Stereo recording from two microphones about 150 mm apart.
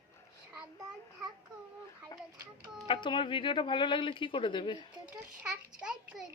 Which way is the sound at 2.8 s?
35° left (ahead or behind).